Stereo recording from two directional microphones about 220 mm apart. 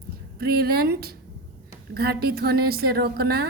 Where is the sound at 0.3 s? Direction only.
45° right (ahead or behind).